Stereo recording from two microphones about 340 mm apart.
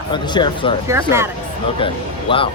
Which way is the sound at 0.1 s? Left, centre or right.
Centre.